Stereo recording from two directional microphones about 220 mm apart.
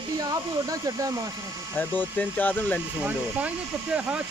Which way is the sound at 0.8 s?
15° right (ahead or behind).